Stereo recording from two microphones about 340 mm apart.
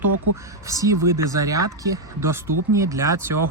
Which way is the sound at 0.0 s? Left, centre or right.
Right.